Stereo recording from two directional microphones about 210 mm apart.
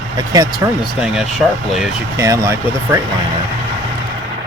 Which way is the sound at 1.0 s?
5° right (ahead or behind).